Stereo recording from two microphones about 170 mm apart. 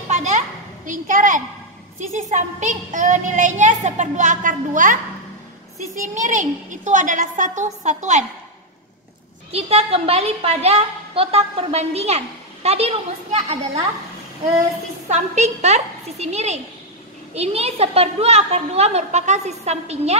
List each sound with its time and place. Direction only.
0.1 s children playing: 45° right (ahead or behind)
0.8 s a woman's voice: 50° right (ahead or behind)
5.9 s a woman's voice: 50° right (ahead or behind)
9.5 s a woman's voice: 35° right (ahead or behind)
15.0 s a woman's voice: 45° right (ahead or behind)